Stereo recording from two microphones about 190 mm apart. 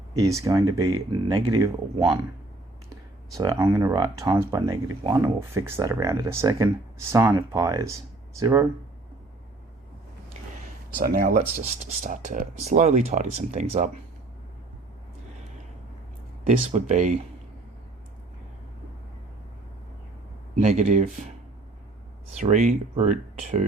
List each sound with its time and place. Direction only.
0.2 s speech: 15° right (ahead or behind)
3.3 s speech: 20° right (ahead or behind)
10.9 s speech: 50° right (ahead or behind)
16.5 s speech: 40° right (ahead or behind)
20.6 s speech: 35° right (ahead or behind)
22.4 s speech: 40° right (ahead or behind)